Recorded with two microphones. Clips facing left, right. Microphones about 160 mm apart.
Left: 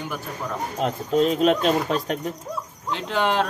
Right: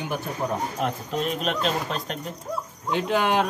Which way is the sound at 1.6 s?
50° left (ahead or behind).